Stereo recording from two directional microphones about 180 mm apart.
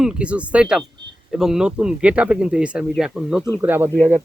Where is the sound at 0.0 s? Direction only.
5° right (ahead or behind).